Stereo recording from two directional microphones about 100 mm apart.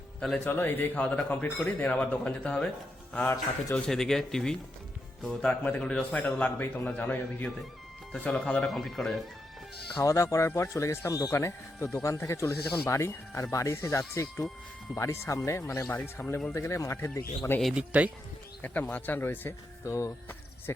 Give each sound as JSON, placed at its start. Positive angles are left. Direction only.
{"t": 0.3, "sound": "a man's voice", "side_deg": 20}
{"t": 10.0, "sound": "speech", "side_deg": 30}
{"t": 17.6, "sound": "speech", "side_deg": 0}
{"t": 18.6, "sound": "speech", "side_deg": 20}
{"t": 19.8, "sound": "speech", "side_deg": 30}